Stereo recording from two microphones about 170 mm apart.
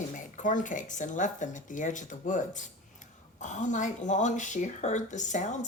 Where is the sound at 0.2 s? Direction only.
50° left (ahead or behind).